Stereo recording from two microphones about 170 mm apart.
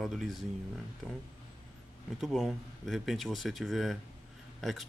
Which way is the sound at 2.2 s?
Centre (ahead or behind).